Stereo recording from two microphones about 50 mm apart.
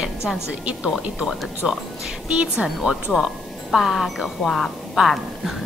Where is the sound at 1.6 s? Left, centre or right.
Centre.